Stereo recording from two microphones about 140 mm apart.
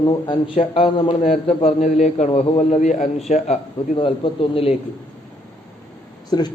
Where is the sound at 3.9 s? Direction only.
35° left (ahead or behind).